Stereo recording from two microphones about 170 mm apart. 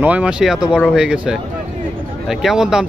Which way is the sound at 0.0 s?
5° right (ahead or behind).